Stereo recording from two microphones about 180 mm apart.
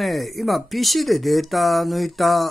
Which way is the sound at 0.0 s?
Centre (ahead or behind).